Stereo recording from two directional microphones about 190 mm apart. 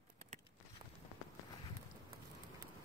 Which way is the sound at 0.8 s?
25° right (ahead or behind).